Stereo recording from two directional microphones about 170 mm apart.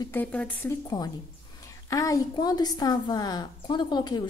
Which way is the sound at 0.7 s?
25° left (ahead or behind).